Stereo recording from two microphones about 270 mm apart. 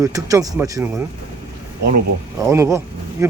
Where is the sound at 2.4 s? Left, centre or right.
Centre.